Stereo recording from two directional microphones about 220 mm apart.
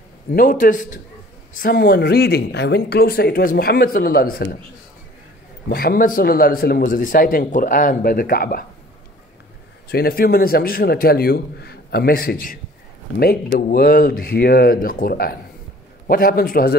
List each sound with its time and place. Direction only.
0.3 s a man's voice: 40° left (ahead or behind)
5.7 s a man's voice: 45° left (ahead or behind)
9.8 s speech: 45° left (ahead or behind)